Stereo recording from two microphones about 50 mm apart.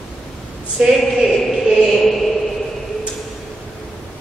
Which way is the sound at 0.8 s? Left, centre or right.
Centre.